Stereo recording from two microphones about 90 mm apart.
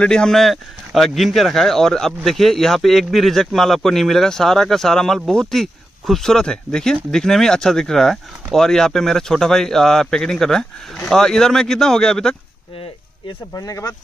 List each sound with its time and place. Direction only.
0.0 s speech: 10° left (ahead or behind)
13.5 s speech: 40° left (ahead or behind)